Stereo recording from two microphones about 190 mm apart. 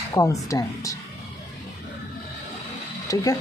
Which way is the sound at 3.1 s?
20° left (ahead or behind).